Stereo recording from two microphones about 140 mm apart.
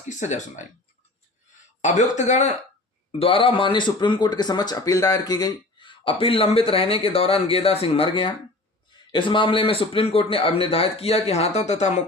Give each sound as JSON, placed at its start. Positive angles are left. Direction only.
{"t": 0.1, "sound": "speech", "side_deg": 60}
{"t": 1.8, "sound": "speech", "side_deg": 60}
{"t": 3.1, "sound": "speech", "side_deg": 40}